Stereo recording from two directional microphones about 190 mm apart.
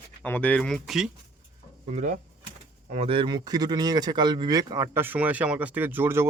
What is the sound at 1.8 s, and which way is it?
Speech, 40° right (ahead or behind).